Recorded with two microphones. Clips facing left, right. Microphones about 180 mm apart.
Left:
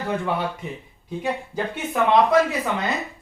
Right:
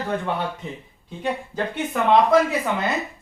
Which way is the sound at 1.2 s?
10° left (ahead or behind).